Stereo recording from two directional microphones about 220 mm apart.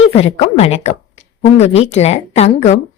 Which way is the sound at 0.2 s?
30° left (ahead or behind).